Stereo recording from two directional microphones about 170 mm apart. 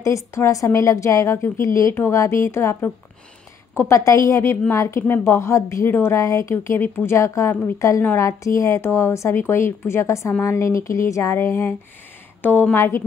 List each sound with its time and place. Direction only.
0.0 s a woman's voice: 15° left (ahead or behind)